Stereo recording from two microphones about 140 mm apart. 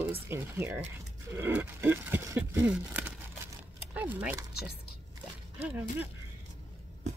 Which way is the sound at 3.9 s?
10° right (ahead or behind).